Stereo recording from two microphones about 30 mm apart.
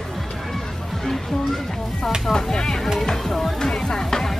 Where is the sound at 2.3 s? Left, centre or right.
Centre.